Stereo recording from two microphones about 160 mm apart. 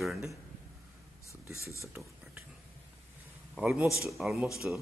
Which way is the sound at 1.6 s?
20° left (ahead or behind).